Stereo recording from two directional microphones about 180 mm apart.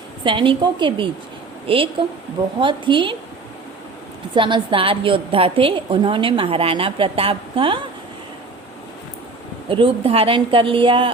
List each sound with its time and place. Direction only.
0.3 s a woman's voice: 30° right (ahead or behind)
4.4 s a woman's voice: 25° right (ahead or behind)
9.6 s a woman's voice: 30° right (ahead or behind)